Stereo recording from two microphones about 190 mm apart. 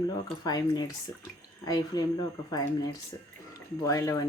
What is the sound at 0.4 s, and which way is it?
Speech, 20° left (ahead or behind).